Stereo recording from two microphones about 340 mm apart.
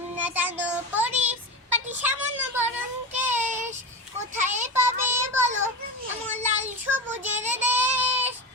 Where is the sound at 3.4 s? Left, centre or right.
Right.